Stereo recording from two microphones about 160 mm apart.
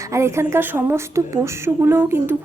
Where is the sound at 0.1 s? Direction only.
15° right (ahead or behind).